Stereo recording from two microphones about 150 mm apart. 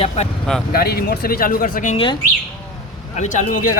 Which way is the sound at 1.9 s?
35° left (ahead or behind).